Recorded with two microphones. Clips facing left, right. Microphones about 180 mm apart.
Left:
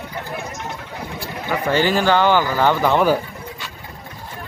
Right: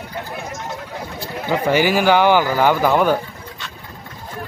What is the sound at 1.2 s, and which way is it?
Speech, 15° right (ahead or behind).